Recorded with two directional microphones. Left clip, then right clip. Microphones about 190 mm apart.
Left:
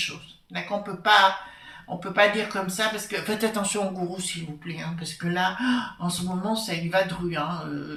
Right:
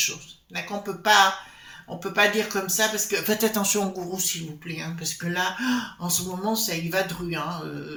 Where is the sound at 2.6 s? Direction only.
45° right (ahead or behind).